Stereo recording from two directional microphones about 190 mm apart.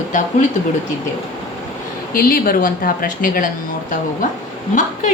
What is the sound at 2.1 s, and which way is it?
A woman's voice, 50° left (ahead or behind).